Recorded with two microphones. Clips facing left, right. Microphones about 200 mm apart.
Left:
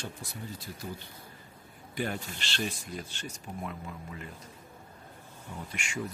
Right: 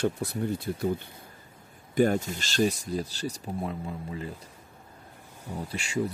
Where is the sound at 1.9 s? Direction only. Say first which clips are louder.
Right 11 dB; 45° right (ahead or behind).